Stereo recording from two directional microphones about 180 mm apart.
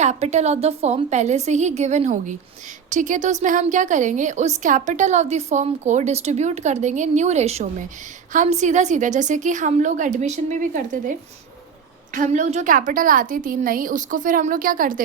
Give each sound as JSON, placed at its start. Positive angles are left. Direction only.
{"t": 0.0, "sound": "a woman's voice", "side_deg": -40}